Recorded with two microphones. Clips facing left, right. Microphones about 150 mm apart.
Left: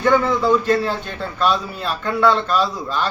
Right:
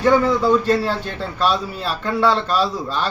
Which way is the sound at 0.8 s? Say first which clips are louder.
Even; 35° right (ahead or behind).